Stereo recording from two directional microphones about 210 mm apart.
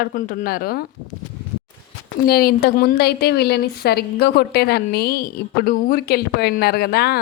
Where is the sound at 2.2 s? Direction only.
45° left (ahead or behind).